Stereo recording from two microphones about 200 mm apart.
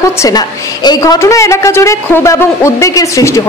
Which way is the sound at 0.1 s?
15° left (ahead or behind).